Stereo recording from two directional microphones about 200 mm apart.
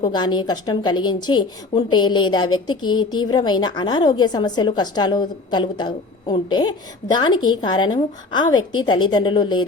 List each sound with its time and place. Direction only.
0.0 s a woman's voice: 20° left (ahead or behind)